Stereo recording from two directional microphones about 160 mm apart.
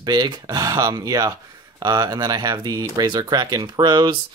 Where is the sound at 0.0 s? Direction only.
25° right (ahead or behind).